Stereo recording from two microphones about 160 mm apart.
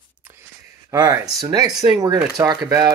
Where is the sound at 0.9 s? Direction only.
25° right (ahead or behind).